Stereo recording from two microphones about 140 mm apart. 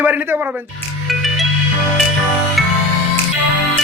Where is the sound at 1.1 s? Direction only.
Centre (ahead or behind).